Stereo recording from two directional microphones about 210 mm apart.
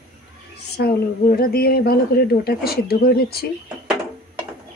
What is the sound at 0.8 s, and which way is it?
Speech, 45° left (ahead or behind).